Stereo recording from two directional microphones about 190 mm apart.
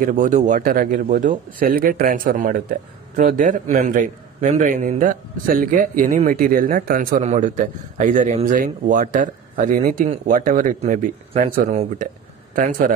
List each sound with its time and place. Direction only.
0.0 s speech: 40° right (ahead or behind)